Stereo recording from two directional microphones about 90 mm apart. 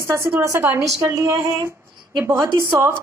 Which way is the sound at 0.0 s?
25° right (ahead or behind).